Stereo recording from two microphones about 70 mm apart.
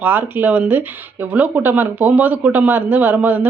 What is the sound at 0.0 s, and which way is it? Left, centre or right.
Speech, right.